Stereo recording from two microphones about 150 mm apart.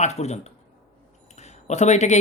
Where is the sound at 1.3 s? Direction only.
50° left (ahead or behind).